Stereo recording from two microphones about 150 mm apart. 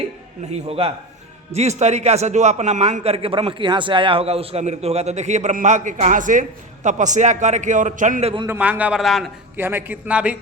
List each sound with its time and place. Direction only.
0.5 s a man's voice: 40° right (ahead or behind); by 8.3 s 55° right (ahead or behind)
8.4 s a man's voice: 10° right (ahead or behind)
9.6 s a man's voice: 15° right (ahead or behind)